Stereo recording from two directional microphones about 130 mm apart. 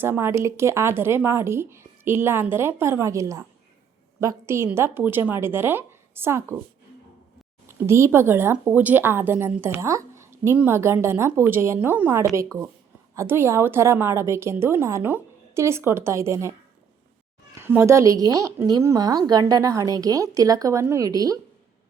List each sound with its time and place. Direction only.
0.0 s a woman's voice: 15° right (ahead or behind)
7.8 s a woman's voice: 20° right (ahead or behind)